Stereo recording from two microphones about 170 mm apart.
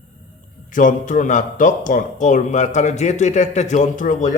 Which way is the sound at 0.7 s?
50° left (ahead or behind).